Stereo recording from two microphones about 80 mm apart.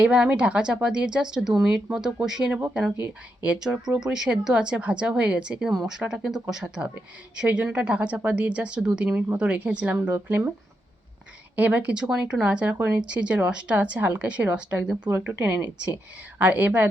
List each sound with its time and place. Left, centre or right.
0.0 s speech: centre
11.5 s speech: right
15.1 s speech: right
15.4 s speech: centre